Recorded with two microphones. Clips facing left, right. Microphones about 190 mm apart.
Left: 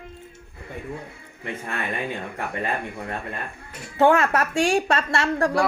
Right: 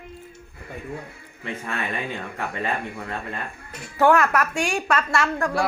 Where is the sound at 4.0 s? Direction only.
25° left (ahead or behind).